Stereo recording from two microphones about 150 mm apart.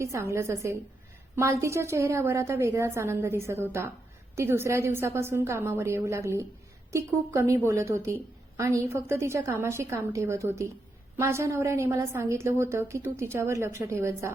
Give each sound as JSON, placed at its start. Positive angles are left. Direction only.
{"t": 0.0, "sound": "a woman's voice", "side_deg": -20}